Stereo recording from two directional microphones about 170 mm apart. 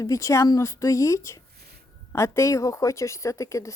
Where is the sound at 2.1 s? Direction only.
15° left (ahead or behind).